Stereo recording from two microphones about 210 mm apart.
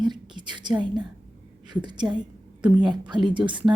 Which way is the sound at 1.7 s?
20° right (ahead or behind).